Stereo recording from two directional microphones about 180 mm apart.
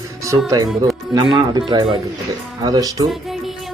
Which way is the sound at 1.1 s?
25° right (ahead or behind).